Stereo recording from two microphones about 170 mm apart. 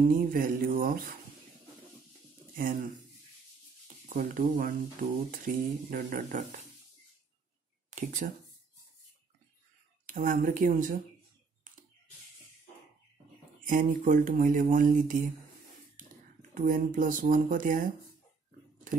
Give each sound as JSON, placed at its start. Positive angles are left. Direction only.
{"t": 0.0, "sound": "mantra", "side_deg": -55}
{"t": 2.5, "sound": "speech", "side_deg": -55}
{"t": 7.9, "sound": "speech", "side_deg": -45}
{"t": 10.0, "sound": "speech", "side_deg": -50}
{"t": 13.7, "sound": "speech", "side_deg": -50}
{"t": 16.5, "sound": "speech", "side_deg": -50}
{"t": 18.9, "sound": "a sound", "side_deg": -50}